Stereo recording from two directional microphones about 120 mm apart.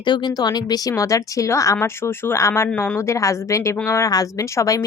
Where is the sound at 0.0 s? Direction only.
35° left (ahead or behind).